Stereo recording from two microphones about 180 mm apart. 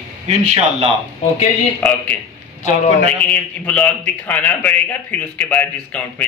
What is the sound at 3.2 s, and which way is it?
A man's voice, 10° left (ahead or behind).